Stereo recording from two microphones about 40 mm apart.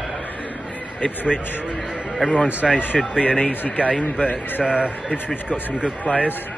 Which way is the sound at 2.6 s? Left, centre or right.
Centre.